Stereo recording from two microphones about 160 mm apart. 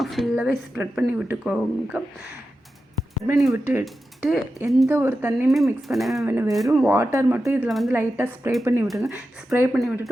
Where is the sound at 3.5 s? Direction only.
15° right (ahead or behind).